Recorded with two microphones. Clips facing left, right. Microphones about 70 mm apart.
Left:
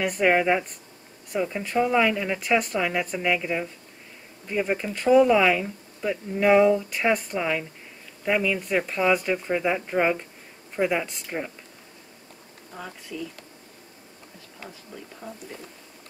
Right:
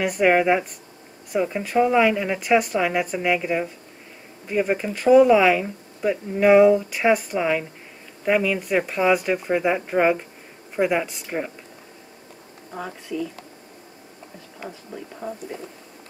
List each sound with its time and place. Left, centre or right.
0.0 s speech: centre
12.7 s speech: right
14.6 s speech: centre